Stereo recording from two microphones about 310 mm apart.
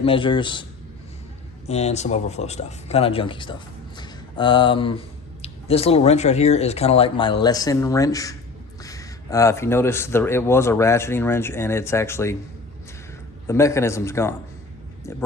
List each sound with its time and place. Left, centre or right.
0.0 s speech: centre
1.6 s speech: centre
13.5 s speech: centre